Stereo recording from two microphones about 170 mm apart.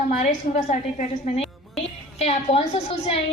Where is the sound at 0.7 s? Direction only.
45° left (ahead or behind).